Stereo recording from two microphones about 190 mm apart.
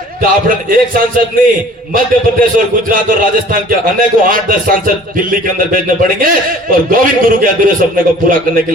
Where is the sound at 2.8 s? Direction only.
45° right (ahead or behind).